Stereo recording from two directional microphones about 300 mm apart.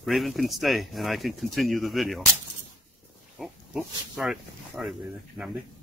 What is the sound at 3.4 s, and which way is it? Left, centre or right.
Speech, centre.